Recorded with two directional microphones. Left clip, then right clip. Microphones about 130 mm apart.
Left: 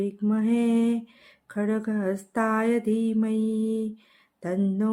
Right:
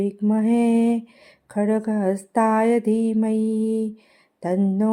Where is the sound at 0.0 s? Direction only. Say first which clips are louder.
Right 5 dB; 25° right (ahead or behind).